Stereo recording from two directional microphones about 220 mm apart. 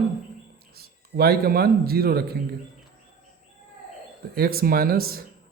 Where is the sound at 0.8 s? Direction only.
45° right (ahead or behind).